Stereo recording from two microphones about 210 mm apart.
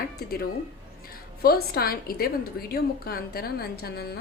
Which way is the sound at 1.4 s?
45° left (ahead or behind).